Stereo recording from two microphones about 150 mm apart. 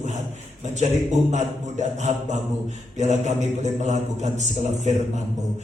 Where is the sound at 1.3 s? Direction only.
50° right (ahead or behind).